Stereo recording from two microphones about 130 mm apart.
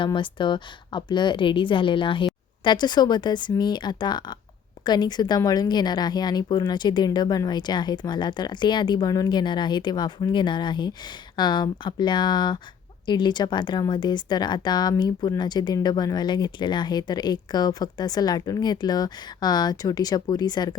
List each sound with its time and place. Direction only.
0.0 s a woman's voice: 40° left (ahead or behind)